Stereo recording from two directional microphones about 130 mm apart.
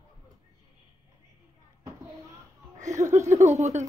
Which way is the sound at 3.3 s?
60° right (ahead or behind).